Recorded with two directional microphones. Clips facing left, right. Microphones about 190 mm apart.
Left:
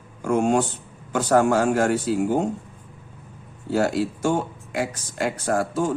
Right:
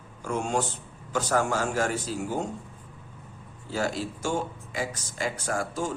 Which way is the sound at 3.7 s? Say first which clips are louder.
Left 8 dB; 60° left (ahead or behind).